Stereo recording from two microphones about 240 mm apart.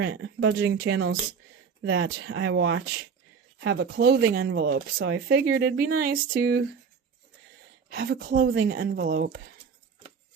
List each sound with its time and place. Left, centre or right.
0.0 s speech: right
7.9 s speech: right